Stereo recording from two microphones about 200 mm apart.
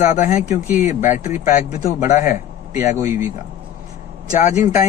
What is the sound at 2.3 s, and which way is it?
Speech, 10° right (ahead or behind).